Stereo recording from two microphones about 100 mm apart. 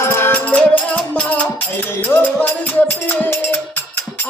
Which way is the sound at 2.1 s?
20° left (ahead or behind).